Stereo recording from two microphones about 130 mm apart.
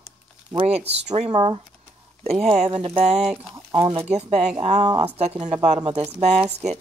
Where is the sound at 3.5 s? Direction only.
30° right (ahead or behind).